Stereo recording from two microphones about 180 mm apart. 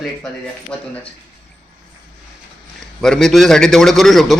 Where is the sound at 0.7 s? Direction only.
5° left (ahead or behind).